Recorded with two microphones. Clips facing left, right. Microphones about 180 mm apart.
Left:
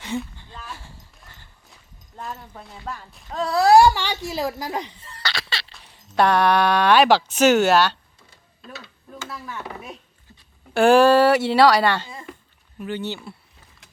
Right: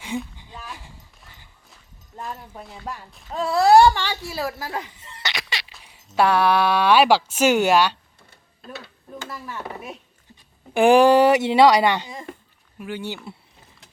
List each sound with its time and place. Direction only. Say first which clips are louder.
0.3 s clip-clop: even; 10° right (ahead or behind)
1.7 s speech: right 2 dB; 5° right (ahead or behind)
3.9 s a woman's voice: left 1 dB; 15° left (ahead or behind)
4.9 s a sound: left 1 dB; 20° right (ahead or behind)
5.7 s speech: left 1 dB; 10° right (ahead or behind)
9.3 s speech: even; centre (ahead or behind)
10.8 s speech: even; 15° right (ahead or behind)